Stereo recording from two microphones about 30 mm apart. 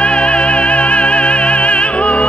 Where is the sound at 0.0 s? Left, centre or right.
Left.